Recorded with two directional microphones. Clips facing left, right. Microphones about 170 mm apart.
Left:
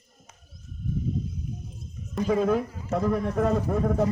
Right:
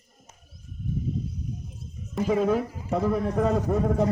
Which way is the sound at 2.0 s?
5° right (ahead or behind).